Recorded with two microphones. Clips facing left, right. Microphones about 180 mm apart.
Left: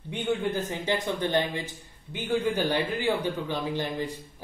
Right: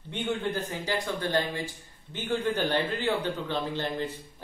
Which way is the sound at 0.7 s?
20° left (ahead or behind).